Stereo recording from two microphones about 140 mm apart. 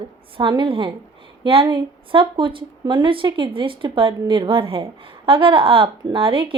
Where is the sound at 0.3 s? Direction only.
35° right (ahead or behind).